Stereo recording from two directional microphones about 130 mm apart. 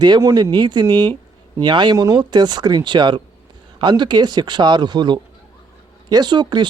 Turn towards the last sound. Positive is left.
turn(degrees=-35)  # may be behind; listen again after turning